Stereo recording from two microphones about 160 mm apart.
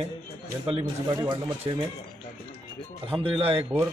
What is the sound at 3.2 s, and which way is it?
Speech, 35° right (ahead or behind).